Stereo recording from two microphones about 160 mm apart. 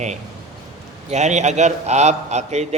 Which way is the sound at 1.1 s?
45° right (ahead or behind).